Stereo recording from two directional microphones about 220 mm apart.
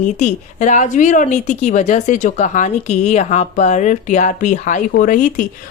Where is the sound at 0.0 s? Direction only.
35° left (ahead or behind).